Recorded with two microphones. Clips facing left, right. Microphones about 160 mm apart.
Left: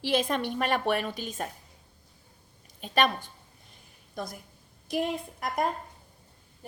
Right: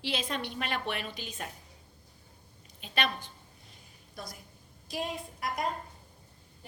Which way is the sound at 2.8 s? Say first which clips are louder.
Left 7 dB; 45° left (ahead or behind).